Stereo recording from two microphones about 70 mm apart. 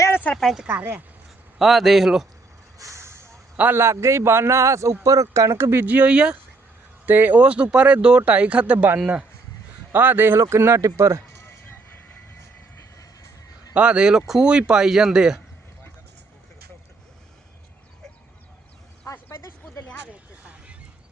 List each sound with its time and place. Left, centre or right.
0.1 s a sound: left
0.7 s speech: right
1.5 s a man's voice: centre
2.7 s vehicle: right
3.8 s a man's voice: right
5.8 s speech: right
7.0 s speech: right
9.9 s speech: right
10.5 s a man's voice: right
13.7 s speech: centre
19.1 s a sound: left
20.4 s a sound: centre